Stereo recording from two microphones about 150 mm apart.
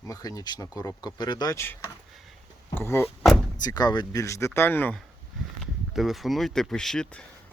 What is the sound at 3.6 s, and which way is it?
Speech, 25° left (ahead or behind).